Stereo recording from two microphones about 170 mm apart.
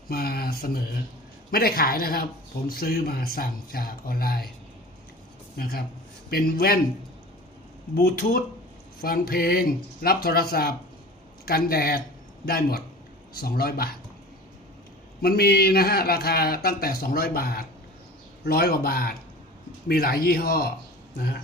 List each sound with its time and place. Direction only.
0.1 s speech: 65° left (ahead or behind)
5.5 s speech: 60° left (ahead or behind)
7.9 s speech: 60° left (ahead or behind)
15.2 s speech: 65° left (ahead or behind)